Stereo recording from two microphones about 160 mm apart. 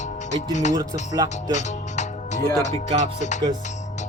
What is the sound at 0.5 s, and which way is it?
Music, 50° left (ahead or behind).